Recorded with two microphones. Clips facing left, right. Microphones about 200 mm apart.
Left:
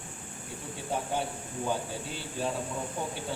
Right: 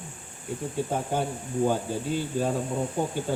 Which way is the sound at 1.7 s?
50° right (ahead or behind).